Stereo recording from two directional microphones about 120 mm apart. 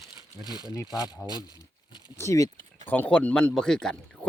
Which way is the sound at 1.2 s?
30° left (ahead or behind).